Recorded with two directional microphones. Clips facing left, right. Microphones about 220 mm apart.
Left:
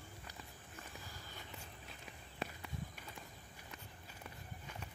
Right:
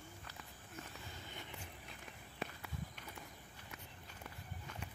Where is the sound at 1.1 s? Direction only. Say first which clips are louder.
Right 2 dB; 20° right (ahead or behind).